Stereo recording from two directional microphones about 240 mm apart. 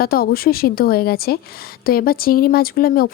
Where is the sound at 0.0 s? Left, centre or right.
Left.